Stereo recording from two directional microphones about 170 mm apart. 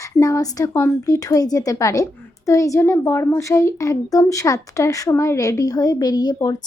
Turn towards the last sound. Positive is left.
turn(degrees=20)  # may be behind; listen again after turning